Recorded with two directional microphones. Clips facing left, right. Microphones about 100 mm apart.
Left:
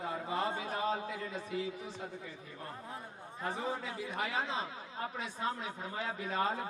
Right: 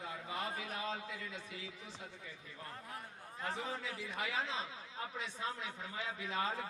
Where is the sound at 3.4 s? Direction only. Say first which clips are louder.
Left 4 dB; 30° left (ahead or behind).